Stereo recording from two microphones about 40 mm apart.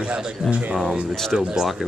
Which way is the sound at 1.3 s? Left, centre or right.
Centre.